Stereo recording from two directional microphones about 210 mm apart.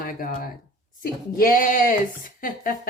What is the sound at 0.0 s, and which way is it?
A woman's voice, 40° left (ahead or behind).